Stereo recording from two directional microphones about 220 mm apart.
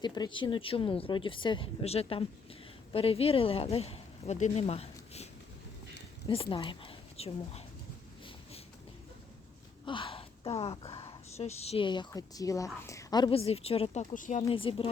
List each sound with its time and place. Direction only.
0.0 s speech: 20° left (ahead or behind)
9.8 s speech: 20° left (ahead or behind)
14.4 s speech: 25° left (ahead or behind)